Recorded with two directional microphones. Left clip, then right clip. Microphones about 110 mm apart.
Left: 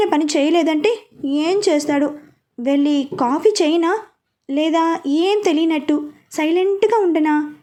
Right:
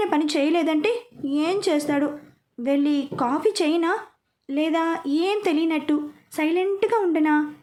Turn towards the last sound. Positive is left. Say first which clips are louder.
# left 4 dB
turn(degrees=35)  # may be behind; listen again after turning